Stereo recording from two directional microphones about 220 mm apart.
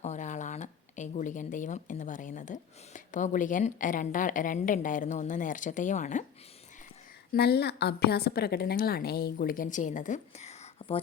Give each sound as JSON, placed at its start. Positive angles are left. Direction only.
{"t": 0.0, "sound": "speech", "side_deg": 30}
{"t": 7.3, "sound": "a woman's voice", "side_deg": 50}